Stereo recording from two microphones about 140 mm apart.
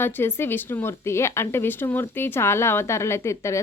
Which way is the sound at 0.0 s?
15° left (ahead or behind).